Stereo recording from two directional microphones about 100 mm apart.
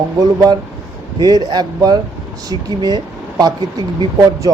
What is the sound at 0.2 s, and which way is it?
Speech, 40° right (ahead or behind).